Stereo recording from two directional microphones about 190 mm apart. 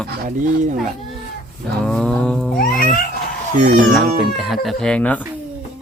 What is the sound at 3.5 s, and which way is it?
Speech, 40° right (ahead or behind).